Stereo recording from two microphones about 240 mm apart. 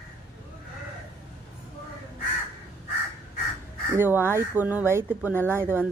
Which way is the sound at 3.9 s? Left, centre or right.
Centre.